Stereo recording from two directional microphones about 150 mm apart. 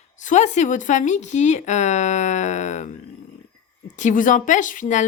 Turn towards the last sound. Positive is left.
turn(degrees=55)  # may be behind; listen again after turning